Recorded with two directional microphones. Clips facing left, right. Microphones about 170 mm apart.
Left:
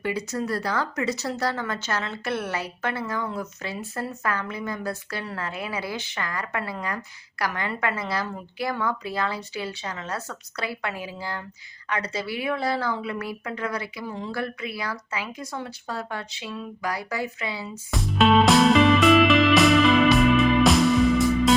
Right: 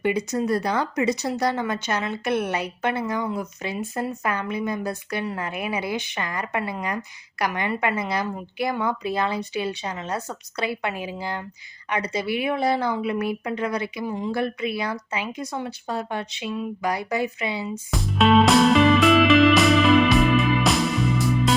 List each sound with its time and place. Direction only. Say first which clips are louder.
0.0 s speech: right 5 dB; 20° right (ahead or behind)
17.9 s music: right 1 dB; centre (ahead or behind)